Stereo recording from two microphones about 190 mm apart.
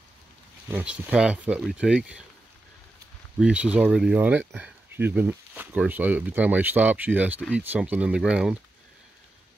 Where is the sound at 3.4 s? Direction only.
5° right (ahead or behind).